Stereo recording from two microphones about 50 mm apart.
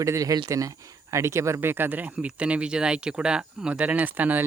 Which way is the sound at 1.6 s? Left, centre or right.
Right.